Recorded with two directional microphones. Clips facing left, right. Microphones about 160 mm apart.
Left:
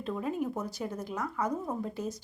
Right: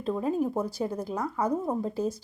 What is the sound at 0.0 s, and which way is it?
Speech, 35° right (ahead or behind).